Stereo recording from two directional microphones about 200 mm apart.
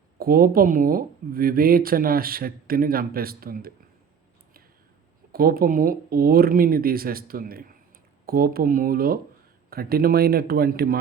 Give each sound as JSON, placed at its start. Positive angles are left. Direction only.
{"t": 0.2, "sound": "speech", "side_deg": -50}
{"t": 5.3, "sound": "speech", "side_deg": -50}